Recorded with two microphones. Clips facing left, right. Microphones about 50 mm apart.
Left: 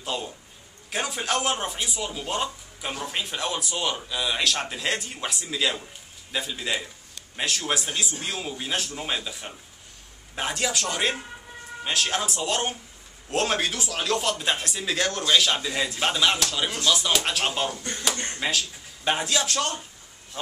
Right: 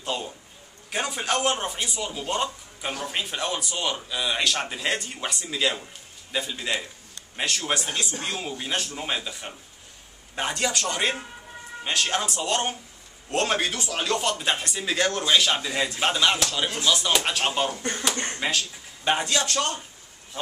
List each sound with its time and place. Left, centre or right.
0.0 s a man's voice: centre
17.7 s speech: right
18.4 s speech: centre